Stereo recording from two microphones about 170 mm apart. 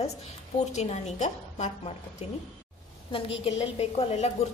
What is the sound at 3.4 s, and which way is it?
Speech, 35° left (ahead or behind).